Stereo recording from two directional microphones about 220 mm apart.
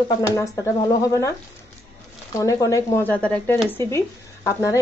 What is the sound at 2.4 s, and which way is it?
Speech, 15° left (ahead or behind).